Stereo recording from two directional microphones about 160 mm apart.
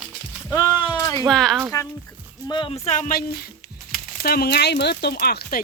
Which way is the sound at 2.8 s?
50° left (ahead or behind).